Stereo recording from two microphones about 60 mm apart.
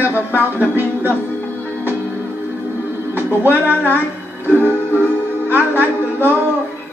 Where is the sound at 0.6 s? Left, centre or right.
Right.